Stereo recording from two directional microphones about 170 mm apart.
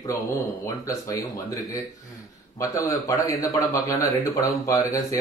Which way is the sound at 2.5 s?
20° left (ahead or behind).